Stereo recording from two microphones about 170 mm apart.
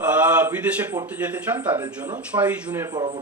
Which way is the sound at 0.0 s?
10° right (ahead or behind).